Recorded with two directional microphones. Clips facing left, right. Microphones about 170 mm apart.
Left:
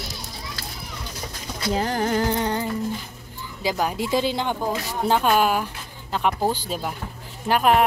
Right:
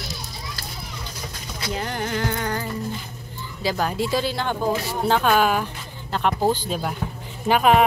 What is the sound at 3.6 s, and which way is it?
A woman's voice, 15° left (ahead or behind).